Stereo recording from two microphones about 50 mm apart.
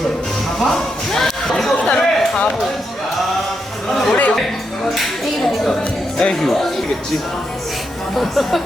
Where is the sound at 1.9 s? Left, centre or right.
Centre.